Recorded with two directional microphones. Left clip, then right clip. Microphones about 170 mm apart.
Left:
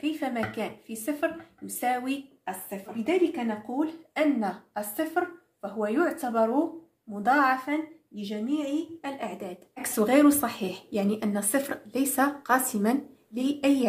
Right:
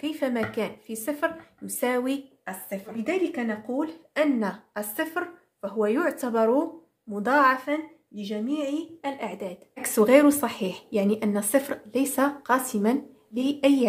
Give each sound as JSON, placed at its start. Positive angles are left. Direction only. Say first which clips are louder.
{"t": 0.0, "sound": "a woman's voice", "louder": "right 2 dB", "side_deg": -45}